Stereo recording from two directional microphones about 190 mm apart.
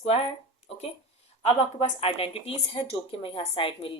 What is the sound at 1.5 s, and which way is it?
Speech, 30° left (ahead or behind).